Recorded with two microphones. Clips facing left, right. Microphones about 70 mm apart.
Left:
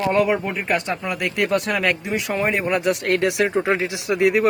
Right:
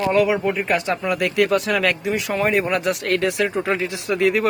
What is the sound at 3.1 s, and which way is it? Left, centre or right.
Speech, left.